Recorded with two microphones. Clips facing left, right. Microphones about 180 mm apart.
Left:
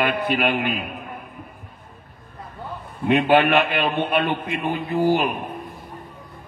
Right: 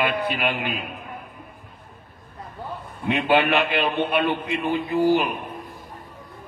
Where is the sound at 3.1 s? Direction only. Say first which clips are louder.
Left 3 dB; 50° left (ahead or behind).